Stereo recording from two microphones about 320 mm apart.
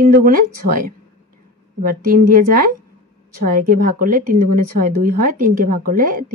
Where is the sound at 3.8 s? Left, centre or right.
Right.